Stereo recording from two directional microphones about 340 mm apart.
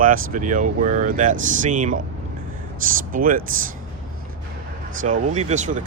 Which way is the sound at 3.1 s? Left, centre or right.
Right.